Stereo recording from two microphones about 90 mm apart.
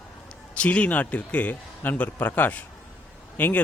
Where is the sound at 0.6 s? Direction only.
15° left (ahead or behind).